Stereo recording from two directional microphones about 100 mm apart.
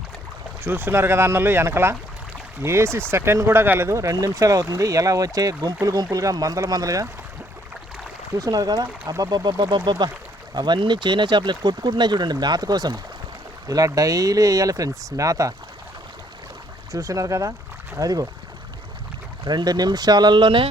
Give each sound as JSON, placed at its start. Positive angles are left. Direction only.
{"t": 0.6, "sound": "speech", "side_deg": -20}
{"t": 8.4, "sound": "speech", "side_deg": -40}
{"t": 16.9, "sound": "speech", "side_deg": -35}
{"t": 19.5, "sound": "speech", "side_deg": -45}